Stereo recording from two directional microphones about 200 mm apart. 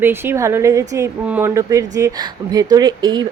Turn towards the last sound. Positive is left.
turn(degrees=-20)  # may be behind; listen again after turning